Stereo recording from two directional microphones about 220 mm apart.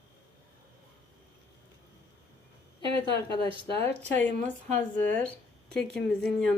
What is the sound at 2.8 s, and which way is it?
Speech, 25° right (ahead or behind).